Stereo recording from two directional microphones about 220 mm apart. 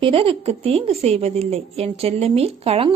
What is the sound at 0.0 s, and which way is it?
A woman's voice, 25° right (ahead or behind).